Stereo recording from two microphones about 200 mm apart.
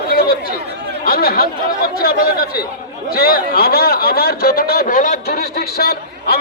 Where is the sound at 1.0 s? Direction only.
50° left (ahead or behind).